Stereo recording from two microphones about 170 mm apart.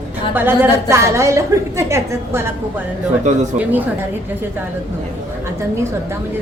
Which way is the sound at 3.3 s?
45° right (ahead or behind).